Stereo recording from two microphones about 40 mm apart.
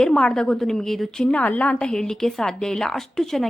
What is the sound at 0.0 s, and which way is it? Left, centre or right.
A woman's voice, centre.